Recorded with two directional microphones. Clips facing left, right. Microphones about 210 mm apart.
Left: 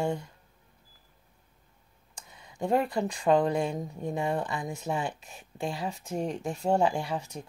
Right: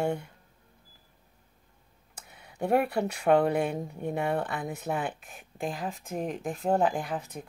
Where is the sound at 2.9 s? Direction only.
65° right (ahead or behind).